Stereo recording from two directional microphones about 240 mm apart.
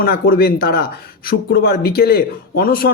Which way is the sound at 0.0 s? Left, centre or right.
Left.